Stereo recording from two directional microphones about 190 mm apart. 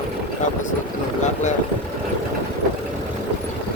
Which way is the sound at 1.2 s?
40° left (ahead or behind).